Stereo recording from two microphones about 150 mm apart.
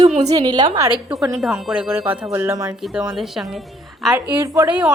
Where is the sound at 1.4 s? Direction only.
5° right (ahead or behind).